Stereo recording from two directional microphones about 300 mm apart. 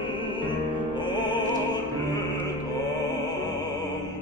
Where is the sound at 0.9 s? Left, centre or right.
Centre.